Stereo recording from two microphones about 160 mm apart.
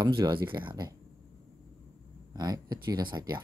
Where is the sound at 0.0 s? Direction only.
25° right (ahead or behind).